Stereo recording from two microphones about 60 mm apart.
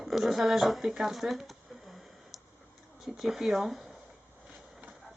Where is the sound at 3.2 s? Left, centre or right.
Centre.